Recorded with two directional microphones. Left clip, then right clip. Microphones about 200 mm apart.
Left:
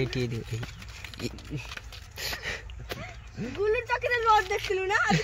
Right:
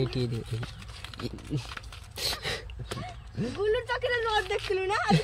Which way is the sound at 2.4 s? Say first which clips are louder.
Right 1 dB; 60° right (ahead or behind).